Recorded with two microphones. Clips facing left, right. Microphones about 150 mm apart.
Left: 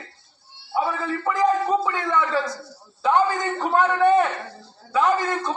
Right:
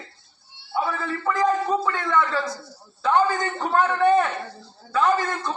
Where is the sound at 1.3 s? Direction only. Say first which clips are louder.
Left 1 dB; 10° left (ahead or behind).